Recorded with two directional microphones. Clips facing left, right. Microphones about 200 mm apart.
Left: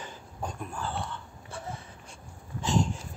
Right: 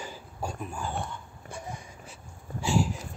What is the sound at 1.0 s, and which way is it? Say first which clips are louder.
Wheeze: even; 15° right (ahead or behind).